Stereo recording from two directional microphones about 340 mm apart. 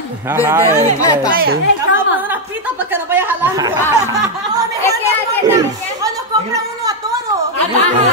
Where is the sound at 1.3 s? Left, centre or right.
Right.